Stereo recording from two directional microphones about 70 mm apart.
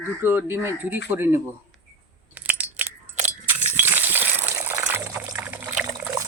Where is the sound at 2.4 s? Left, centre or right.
Right.